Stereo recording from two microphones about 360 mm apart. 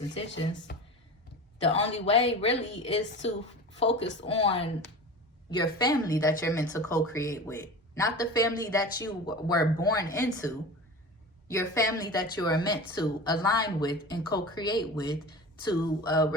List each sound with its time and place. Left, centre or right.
0.3 s speech: left
1.6 s a woman's voice: centre
3.8 s speech: left
4.3 s a woman's voice: centre